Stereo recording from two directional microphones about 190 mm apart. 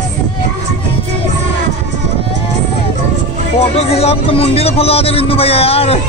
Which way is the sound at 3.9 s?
30° left (ahead or behind).